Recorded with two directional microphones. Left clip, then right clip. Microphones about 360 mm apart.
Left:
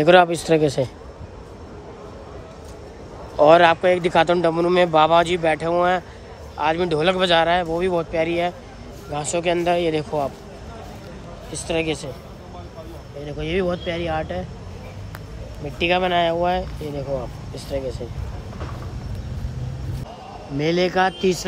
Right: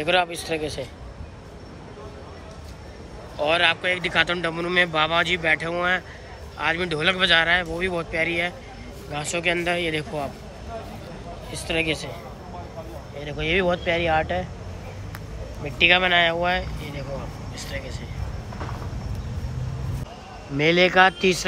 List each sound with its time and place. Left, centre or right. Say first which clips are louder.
0.0 s a man's voice: left 8 dB; left
3.3 s speech: left 8 dB; left
11.5 s speech: left 1 dB; centre
13.2 s speech: right 1 dB; centre
15.6 s speech: right 2 dB; centre
20.5 s speech: right 3 dB; centre